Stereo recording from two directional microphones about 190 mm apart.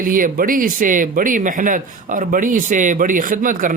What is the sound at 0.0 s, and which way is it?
Speech, 45° right (ahead or behind).